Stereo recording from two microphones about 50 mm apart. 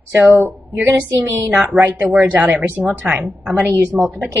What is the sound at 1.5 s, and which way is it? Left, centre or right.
Speech, right.